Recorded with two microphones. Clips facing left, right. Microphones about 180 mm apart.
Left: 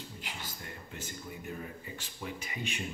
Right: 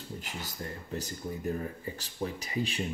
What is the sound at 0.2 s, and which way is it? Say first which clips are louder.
Speech: right 5 dB; 40° right (ahead or behind).